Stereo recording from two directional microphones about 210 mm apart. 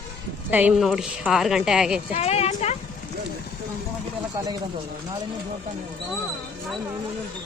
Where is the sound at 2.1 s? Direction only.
30° left (ahead or behind).